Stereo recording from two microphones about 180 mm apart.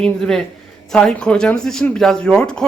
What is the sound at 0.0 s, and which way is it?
Speech, 5° left (ahead or behind).